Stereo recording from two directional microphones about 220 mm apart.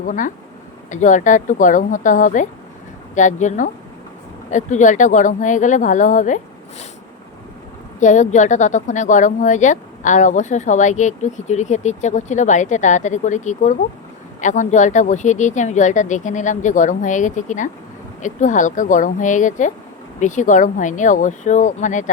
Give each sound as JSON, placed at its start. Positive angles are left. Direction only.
{"t": 0.0, "sound": "speech", "side_deg": 35}
{"t": 7.9, "sound": "speech", "side_deg": 35}